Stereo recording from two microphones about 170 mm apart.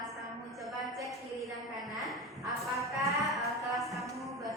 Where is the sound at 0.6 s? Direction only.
Centre (ahead or behind).